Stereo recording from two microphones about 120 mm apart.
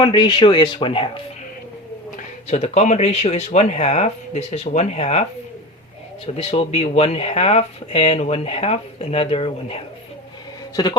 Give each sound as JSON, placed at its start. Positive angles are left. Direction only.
{"t": 0.0, "sound": "speech", "side_deg": 40}
{"t": 2.5, "sound": "speech", "side_deg": 65}
{"t": 6.2, "sound": "speech", "side_deg": 55}